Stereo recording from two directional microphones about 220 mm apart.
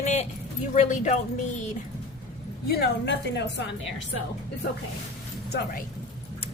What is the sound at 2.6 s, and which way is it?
A woman's voice, 45° left (ahead or behind).